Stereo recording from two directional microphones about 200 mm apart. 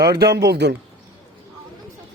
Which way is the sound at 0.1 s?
55° right (ahead or behind).